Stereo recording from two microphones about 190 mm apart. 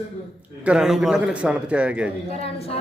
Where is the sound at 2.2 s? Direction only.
30° left (ahead or behind).